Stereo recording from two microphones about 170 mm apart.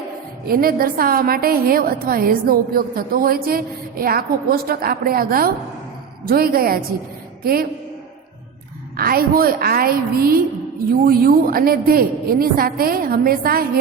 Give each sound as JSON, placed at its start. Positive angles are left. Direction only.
{"t": 0.4, "sound": "a woman's voice", "side_deg": -60}
{"t": 9.0, "sound": "a woman's voice", "side_deg": -60}